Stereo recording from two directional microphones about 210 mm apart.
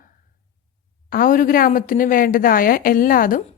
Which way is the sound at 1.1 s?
40° left (ahead or behind).